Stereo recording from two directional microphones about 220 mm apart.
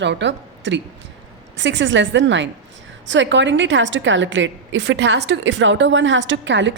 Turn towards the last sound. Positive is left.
turn(degrees=-55)  # may be behind; listen again after turning